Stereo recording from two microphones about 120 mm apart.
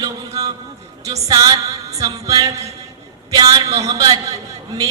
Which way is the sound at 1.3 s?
30° right (ahead or behind).